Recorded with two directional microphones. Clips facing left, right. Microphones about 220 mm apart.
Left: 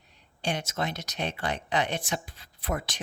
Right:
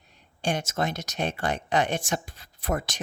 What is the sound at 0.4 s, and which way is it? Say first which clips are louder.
Speech: right 3 dB; 45° right (ahead or behind).